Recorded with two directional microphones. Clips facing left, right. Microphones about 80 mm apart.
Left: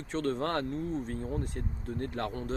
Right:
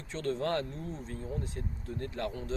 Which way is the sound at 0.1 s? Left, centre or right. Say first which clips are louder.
Left 1 dB; left.